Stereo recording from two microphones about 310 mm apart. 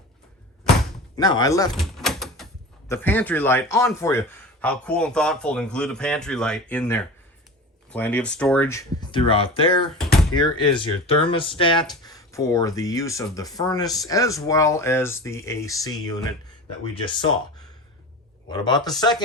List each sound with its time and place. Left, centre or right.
1.1 s speech: centre
1.8 s door: centre
2.9 s a man's voice: centre